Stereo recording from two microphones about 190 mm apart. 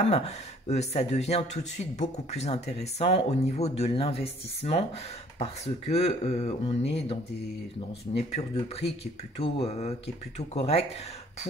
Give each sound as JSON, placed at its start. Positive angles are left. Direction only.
{"t": 0.0, "sound": "speech", "side_deg": 35}
{"t": 8.3, "sound": "speech", "side_deg": 35}